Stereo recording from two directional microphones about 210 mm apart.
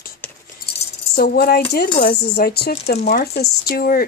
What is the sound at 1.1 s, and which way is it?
Speech, 50° left (ahead or behind).